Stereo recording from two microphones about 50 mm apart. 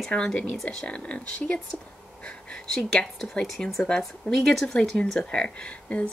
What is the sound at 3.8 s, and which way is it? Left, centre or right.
Speech, centre.